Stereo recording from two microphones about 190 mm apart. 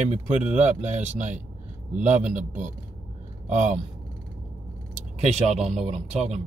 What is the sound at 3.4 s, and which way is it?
Speech, 40° right (ahead or behind).